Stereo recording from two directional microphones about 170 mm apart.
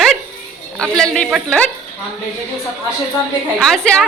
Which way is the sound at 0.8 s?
5° left (ahead or behind).